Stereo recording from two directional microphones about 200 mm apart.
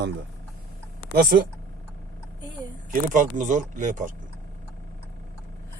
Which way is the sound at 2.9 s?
40° right (ahead or behind).